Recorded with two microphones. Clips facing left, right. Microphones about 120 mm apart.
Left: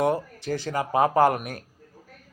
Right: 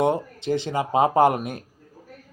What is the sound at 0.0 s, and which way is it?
A man's voice, 20° right (ahead or behind).